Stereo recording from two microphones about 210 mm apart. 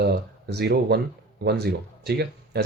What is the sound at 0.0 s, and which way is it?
Speech, 50° right (ahead or behind).